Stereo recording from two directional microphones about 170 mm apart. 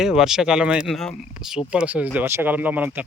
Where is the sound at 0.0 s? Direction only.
5° right (ahead or behind).